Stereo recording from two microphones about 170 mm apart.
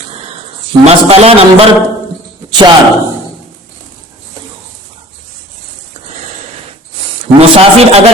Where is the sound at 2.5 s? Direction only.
25° right (ahead or behind).